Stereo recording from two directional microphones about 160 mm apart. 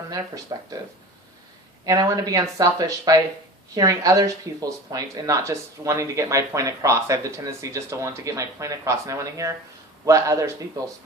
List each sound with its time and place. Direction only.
0.5 s speech: 25° right (ahead or behind)
1.8 s speech: 20° right (ahead or behind)